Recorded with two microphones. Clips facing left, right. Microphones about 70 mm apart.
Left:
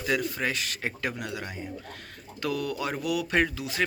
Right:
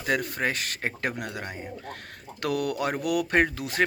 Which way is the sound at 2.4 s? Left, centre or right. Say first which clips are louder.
Right 3 dB; right.